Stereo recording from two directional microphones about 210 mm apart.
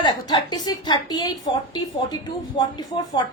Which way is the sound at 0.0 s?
20° left (ahead or behind).